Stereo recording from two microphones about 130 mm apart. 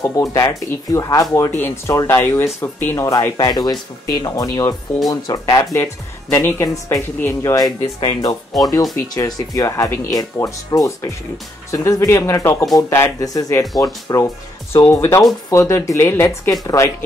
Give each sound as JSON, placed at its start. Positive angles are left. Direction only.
{"t": 0.0, "sound": "speech", "side_deg": 25}
{"t": 6.3, "sound": "speech", "side_deg": 20}
{"t": 8.5, "sound": "speech", "side_deg": 0}
{"t": 8.9, "sound": "speech", "side_deg": 25}